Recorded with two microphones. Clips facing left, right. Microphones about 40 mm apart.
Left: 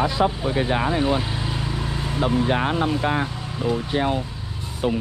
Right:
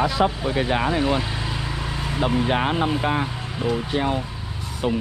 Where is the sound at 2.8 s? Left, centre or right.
Right.